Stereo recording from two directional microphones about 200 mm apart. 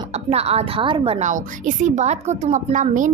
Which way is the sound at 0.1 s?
30° right (ahead or behind).